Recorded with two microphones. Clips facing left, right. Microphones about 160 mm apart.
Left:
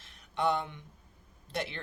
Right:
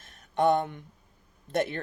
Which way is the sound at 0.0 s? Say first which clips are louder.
Right 6 dB; 50° right (ahead or behind).